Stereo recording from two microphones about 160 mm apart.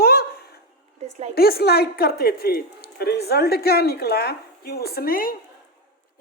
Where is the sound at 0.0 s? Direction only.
75° left (ahead or behind).